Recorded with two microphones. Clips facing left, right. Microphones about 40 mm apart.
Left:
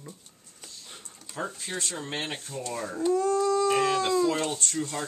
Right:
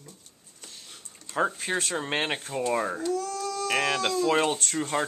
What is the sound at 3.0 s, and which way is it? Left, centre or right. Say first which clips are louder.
Dog: left 5 dB; left.